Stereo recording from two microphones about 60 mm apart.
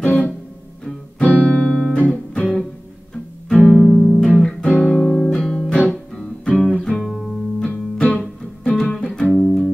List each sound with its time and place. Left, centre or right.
0.0 s music: left
3.7 s music: centre
4.6 s music: left
5.0 s music: centre
6.1 s guitar: centre
6.9 s music: centre
7.6 s music: centre
8.2 s music: centre